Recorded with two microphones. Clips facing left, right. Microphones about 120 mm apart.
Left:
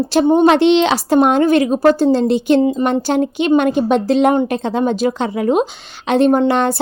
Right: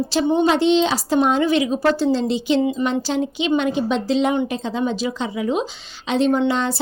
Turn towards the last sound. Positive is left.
turn(degrees=60)  # may be behind; listen again after turning